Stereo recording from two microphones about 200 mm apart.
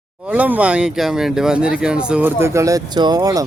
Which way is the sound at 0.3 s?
5° right (ahead or behind).